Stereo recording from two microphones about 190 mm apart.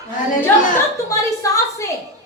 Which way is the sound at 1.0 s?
15° left (ahead or behind).